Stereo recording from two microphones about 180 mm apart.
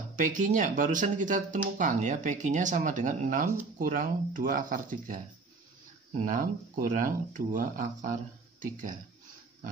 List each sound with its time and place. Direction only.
0.1 s speech: 45° right (ahead or behind)
6.2 s speech: 45° right (ahead or behind)